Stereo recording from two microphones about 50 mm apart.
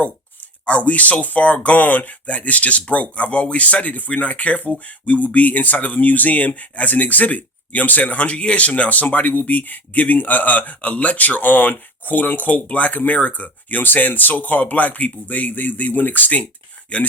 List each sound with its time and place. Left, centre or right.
0.6 s speech: left